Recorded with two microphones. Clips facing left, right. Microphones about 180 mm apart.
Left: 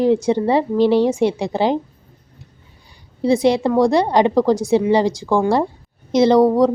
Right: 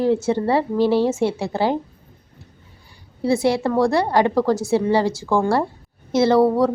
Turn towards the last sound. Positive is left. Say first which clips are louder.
# left 3 dB
turn(degrees=15)  # may be behind; listen again after turning